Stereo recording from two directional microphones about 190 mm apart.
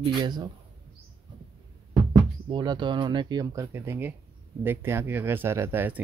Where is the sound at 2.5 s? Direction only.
25° right (ahead or behind).